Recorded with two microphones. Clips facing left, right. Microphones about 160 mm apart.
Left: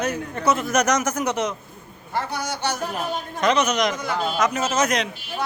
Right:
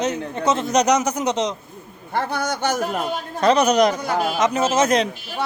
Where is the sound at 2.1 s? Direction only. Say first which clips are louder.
Right 4 dB; 55° right (ahead or behind).